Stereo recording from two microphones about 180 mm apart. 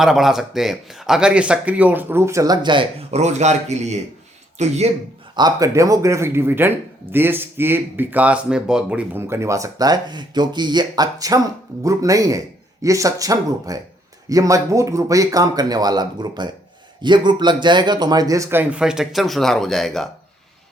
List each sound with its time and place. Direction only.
0.0 s speech: centre (ahead or behind); by 4.9 s 40° right (ahead or behind)
5.4 s speech: 20° right (ahead or behind); by 20.1 s centre (ahead or behind)